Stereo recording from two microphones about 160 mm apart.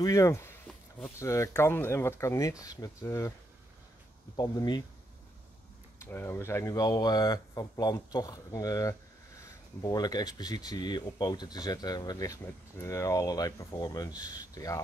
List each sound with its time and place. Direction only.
0.0 s speech: 20° left (ahead or behind)
0.7 s a sound: 5° left (ahead or behind)
1.2 s speech: 20° left (ahead or behind)
4.4 s speech: 25° left (ahead or behind)
6.0 s speech: 15° left (ahead or behind)